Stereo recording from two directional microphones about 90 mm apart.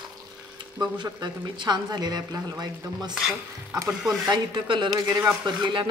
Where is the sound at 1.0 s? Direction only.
45° right (ahead or behind).